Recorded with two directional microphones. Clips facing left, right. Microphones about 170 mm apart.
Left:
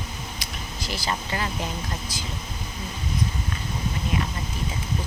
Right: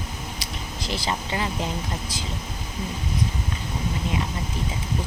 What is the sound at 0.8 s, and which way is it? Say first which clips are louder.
Speech: right 1 dB; 25° right (ahead or behind).